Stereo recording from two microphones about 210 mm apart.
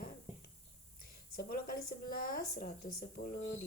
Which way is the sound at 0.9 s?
45° left (ahead or behind).